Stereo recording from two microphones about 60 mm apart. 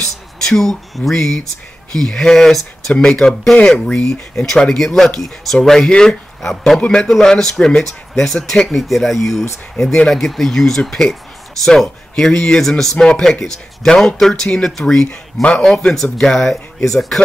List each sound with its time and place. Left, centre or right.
0.0 s speech: centre
3.5 s speech: left; by 17.2 s centre